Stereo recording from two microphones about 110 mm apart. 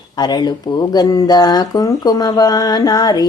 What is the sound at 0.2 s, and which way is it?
Speech, 40° left (ahead or behind).